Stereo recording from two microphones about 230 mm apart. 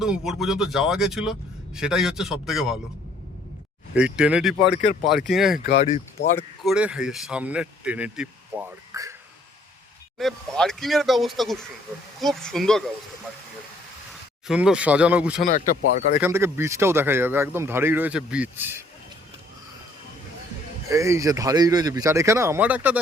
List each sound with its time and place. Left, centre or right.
0.0 s a man's voice: centre
3.9 s a man's voice: centre
4.7 s speech: left
5.0 s a man's voice: centre
5.5 s speech: left
6.7 s a man's voice: centre
10.2 s a man's voice: centre
14.1 s speech: centre
15.4 s speech: left
16.2 s speech: centre
20.9 s speech: centre